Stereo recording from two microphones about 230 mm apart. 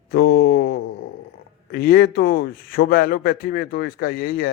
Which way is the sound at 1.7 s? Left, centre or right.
Left.